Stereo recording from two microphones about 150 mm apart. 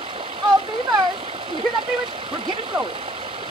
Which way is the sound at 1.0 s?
35° right (ahead or behind).